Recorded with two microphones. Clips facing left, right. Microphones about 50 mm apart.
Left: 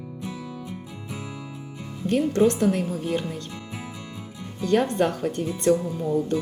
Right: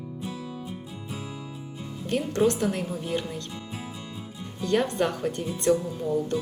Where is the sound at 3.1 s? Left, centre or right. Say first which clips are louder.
Left 3 dB; centre.